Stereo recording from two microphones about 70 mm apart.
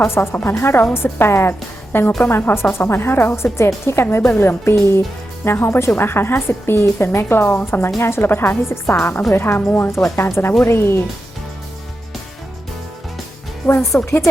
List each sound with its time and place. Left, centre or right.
0.1 s a woman's voice: left
13.9 s a woman's voice: left